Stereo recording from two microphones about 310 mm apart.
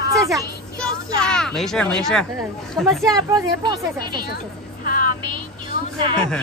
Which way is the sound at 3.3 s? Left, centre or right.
Centre.